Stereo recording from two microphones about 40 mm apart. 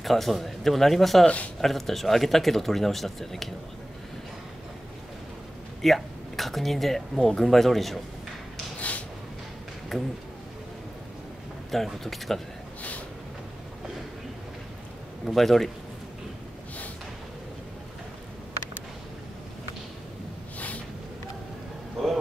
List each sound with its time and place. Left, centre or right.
0.0 s speech: centre
1.2 s speech: left
1.6 s speech: centre
5.8 s speech: centre
8.8 s a sound: left
9.9 s speech: centre
11.7 s speech: centre
15.2 s speech: centre
20.5 s a sound: left